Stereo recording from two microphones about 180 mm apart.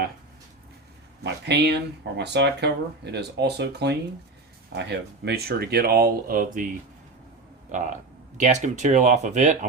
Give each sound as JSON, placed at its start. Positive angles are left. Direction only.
{"t": 1.2, "sound": "speech", "side_deg": -70}
{"t": 7.7, "sound": "speech", "side_deg": -45}